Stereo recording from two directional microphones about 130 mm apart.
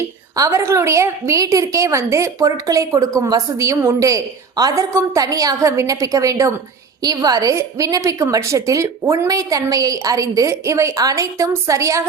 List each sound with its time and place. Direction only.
0.3 s a woman's voice: 25° right (ahead or behind)